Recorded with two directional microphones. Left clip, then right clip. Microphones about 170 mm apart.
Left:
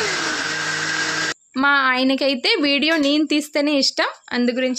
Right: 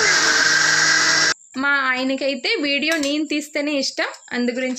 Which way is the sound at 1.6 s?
15° left (ahead or behind).